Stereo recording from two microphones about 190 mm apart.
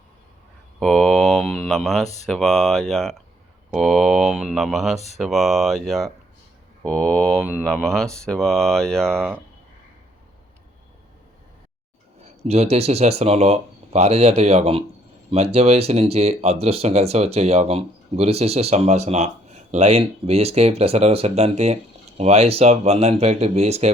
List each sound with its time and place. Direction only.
0.8 s speech: centre (ahead or behind)
12.4 s speech: 35° right (ahead or behind)